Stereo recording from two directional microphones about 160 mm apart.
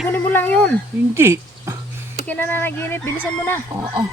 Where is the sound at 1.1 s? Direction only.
15° right (ahead or behind).